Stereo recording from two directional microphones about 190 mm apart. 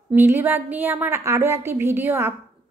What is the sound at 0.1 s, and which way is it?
A woman's voice, 10° right (ahead or behind).